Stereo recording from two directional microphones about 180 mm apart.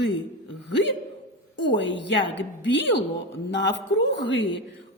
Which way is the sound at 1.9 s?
90° left.